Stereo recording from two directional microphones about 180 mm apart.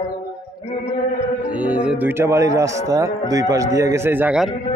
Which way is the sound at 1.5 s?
10° right (ahead or behind).